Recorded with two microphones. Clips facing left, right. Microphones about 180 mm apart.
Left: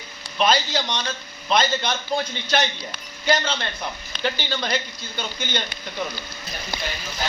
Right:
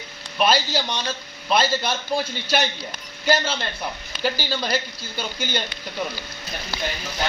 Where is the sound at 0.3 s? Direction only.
10° right (ahead or behind).